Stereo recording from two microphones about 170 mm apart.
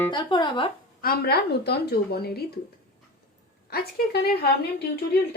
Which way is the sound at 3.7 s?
65° left (ahead or behind).